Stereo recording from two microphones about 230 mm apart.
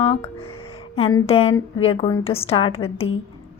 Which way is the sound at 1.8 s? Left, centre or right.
Left.